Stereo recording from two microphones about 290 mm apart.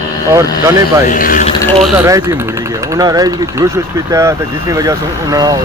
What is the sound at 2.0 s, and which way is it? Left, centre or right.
Speech, centre.